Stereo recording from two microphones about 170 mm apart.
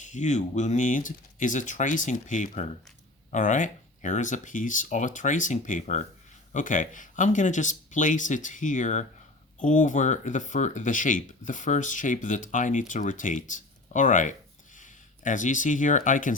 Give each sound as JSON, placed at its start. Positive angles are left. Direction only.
{"t": 0.0, "sound": "speech", "side_deg": 45}